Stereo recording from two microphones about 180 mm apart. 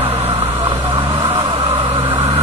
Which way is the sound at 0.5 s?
30° right (ahead or behind).